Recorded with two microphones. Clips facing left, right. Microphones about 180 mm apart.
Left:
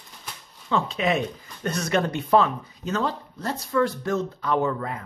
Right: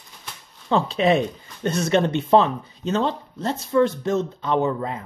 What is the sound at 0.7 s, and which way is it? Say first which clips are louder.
Speech: right 5 dB; 30° right (ahead or behind).